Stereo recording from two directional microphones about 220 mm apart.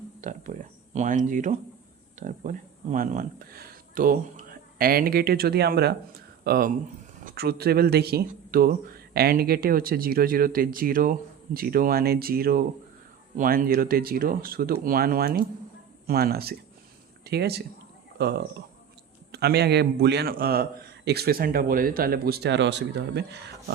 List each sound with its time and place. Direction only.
0.2 s a man's voice: 35° right (ahead or behind)